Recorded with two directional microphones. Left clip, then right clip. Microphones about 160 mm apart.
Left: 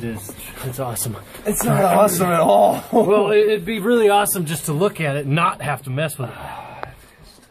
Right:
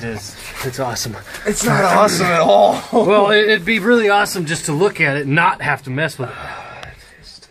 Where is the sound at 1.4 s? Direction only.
15° left (ahead or behind).